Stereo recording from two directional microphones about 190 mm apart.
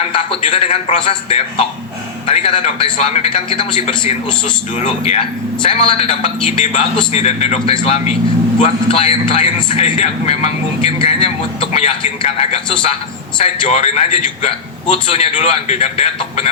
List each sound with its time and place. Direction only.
0.1 s a man's voice: 30° left (ahead or behind)